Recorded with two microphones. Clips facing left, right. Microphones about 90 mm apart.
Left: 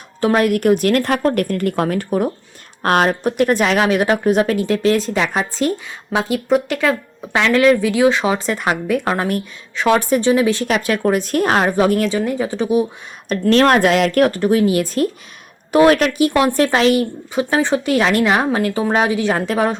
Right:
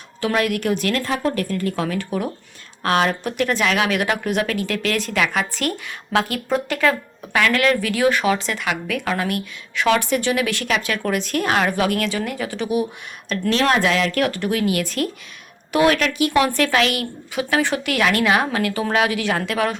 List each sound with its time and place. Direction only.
0.2 s speech: 35° left (ahead or behind)
1.0 s a woman's voice: 60° left (ahead or behind); by 5.7 s 30° left (ahead or behind)
6.1 s a woman's voice: 20° left (ahead or behind)
8.4 s a woman's voice: 40° left (ahead or behind)
13.5 s a woman's voice: 50° left (ahead or behind); by 19.7 s 35° left (ahead or behind)